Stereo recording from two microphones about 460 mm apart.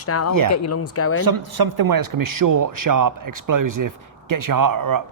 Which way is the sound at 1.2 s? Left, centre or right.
Right.